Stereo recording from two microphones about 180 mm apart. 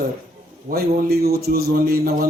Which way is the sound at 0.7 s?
60° right (ahead or behind).